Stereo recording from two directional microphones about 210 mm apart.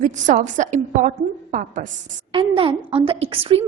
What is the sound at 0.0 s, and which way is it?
A woman's voice, 35° right (ahead or behind).